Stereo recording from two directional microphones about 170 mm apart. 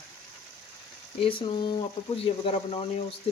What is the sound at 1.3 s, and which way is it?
Speech, 30° left (ahead or behind).